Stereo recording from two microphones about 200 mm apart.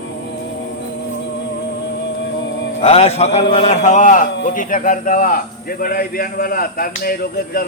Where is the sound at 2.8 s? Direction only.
30° left (ahead or behind).